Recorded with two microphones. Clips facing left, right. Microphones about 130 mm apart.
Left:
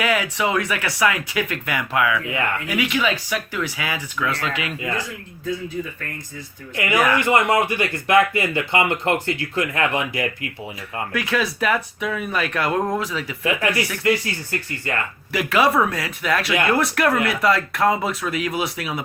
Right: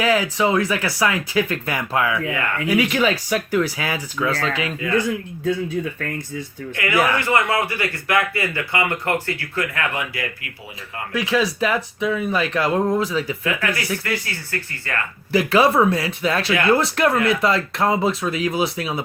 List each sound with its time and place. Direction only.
0.0 s speech: 30° right (ahead or behind)
6.7 s speech: 20° left (ahead or behind)
11.1 s speech: 25° right (ahead or behind)
13.4 s speech: 25° left (ahead or behind)
15.3 s speech: 30° right (ahead or behind)